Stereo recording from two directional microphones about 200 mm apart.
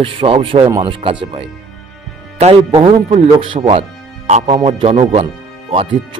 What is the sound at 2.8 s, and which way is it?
Speech, 25° right (ahead or behind).